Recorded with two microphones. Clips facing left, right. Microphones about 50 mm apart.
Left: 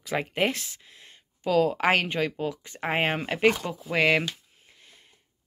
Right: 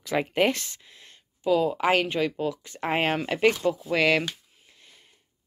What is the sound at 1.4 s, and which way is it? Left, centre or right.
Speech, left.